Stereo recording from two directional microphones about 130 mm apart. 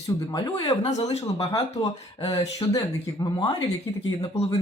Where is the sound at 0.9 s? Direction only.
60° left (ahead or behind).